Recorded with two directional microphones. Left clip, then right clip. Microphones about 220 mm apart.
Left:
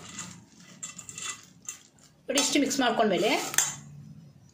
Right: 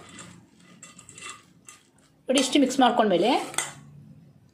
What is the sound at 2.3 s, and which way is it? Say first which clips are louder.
A woman's voice: right 4 dB; 25° right (ahead or behind).